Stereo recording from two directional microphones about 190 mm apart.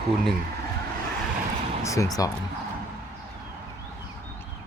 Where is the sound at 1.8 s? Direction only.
15° left (ahead or behind).